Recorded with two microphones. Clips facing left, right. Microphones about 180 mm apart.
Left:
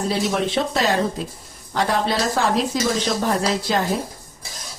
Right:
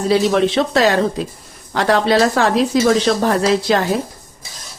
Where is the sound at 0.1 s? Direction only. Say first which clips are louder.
Right 10 dB; 85° right.